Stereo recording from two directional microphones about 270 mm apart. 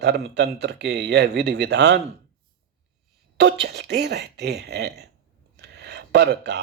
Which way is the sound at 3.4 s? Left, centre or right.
Right.